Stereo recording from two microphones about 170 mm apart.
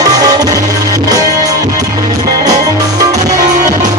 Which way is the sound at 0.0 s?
20° right (ahead or behind).